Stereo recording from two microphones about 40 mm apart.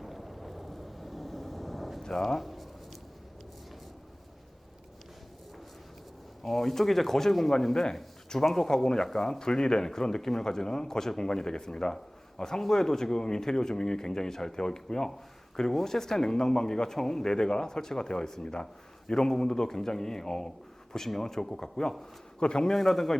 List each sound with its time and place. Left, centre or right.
0.0 s vehicle: centre
2.0 s a man's voice: centre
2.4 s a sound: centre
6.4 s a man's voice: centre
22.7 s a man's voice: centre